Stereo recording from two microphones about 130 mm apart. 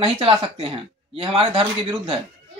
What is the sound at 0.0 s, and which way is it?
Speech, 45° right (ahead or behind).